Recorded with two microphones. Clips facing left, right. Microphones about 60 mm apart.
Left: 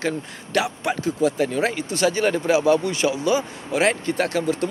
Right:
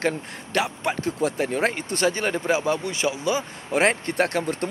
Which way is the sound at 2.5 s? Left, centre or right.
Right.